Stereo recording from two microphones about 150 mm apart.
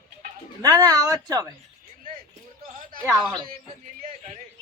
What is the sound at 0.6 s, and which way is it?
Speech, 25° right (ahead or behind).